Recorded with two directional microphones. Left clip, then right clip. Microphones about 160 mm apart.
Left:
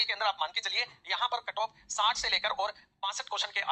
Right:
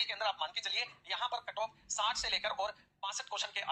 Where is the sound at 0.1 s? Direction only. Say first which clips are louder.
Left 6 dB; 45° left (ahead or behind).